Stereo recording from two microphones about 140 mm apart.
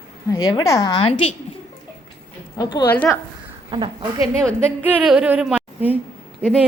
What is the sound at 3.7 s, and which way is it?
Speech, 35° right (ahead or behind).